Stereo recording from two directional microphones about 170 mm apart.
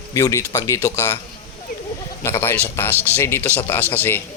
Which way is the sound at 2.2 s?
15° left (ahead or behind).